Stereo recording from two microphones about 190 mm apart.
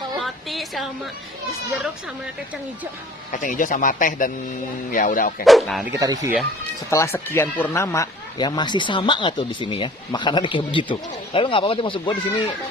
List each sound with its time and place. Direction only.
0.2 s a sound: centre (ahead or behind)
3.3 s speech: 45° left (ahead or behind)
5.5 s speech: centre (ahead or behind)
5.9 s speech: 15° right (ahead or behind)
6.9 s speech: 15° left (ahead or behind)